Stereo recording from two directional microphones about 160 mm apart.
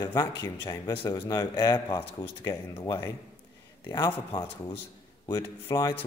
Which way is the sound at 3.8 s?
30° left (ahead or behind).